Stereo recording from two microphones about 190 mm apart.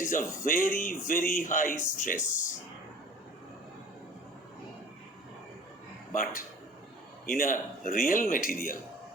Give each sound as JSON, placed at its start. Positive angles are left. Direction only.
{"t": 0.0, "sound": "speech", "side_deg": 45}
{"t": 2.1, "sound": "speech", "side_deg": 15}
{"t": 6.1, "sound": "speech", "side_deg": 45}